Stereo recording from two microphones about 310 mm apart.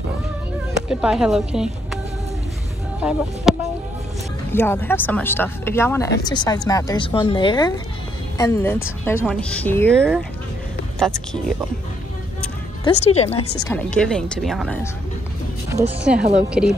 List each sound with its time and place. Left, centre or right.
0.8 s a woman's voice: centre
3.0 s speech: centre
4.5 s speech: centre
11.0 s speech: centre
12.8 s speech: left
13.4 s speech: left
13.7 s speech: centre
15.7 s speech: centre
16.0 s speech: centre